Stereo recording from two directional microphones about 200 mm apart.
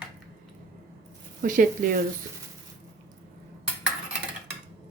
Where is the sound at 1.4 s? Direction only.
40° right (ahead or behind).